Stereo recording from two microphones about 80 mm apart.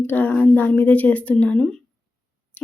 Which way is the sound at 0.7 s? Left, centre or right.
Centre.